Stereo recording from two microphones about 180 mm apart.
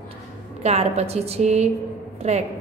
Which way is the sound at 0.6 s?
35° right (ahead or behind).